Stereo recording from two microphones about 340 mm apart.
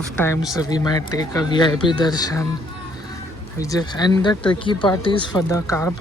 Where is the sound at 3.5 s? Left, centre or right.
Centre.